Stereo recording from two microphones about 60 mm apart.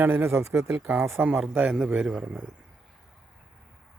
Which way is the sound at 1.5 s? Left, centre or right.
Right.